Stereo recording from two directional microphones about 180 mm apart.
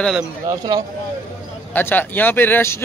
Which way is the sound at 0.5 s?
20° right (ahead or behind).